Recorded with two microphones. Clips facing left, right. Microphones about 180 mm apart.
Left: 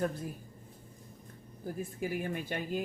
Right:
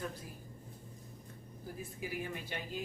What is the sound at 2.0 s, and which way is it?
Speech, 50° left (ahead or behind).